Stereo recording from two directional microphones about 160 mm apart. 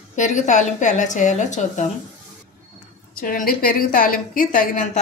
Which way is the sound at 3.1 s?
60° left (ahead or behind).